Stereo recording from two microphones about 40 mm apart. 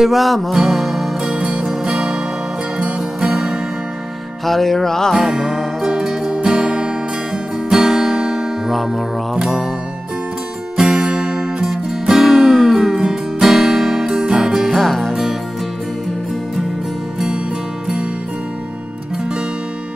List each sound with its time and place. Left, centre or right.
0.0 s music: centre
1.4 s music: right
4.5 s music: centre
5.1 s music: centre
7.7 s guitar: centre
8.6 s music: centre
10.8 s music: centre
14.8 s music: centre